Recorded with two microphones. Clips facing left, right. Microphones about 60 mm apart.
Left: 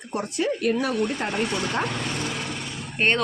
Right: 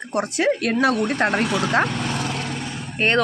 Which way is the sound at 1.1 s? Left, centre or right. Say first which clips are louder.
Right 6 dB; right.